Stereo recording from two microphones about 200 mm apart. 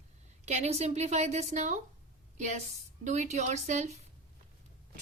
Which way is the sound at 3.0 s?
35° right (ahead or behind).